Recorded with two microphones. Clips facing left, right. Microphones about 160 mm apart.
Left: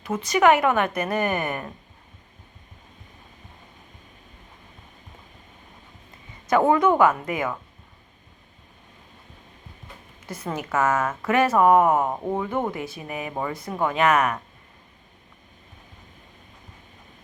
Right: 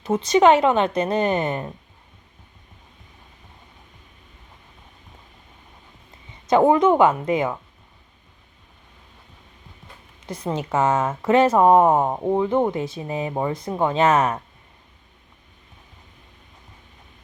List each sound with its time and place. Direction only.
0.3 s a woman's voice: 20° right (ahead or behind)
6.5 s a woman's voice: 20° right (ahead or behind)
10.2 s a woman's voice: 20° right (ahead or behind)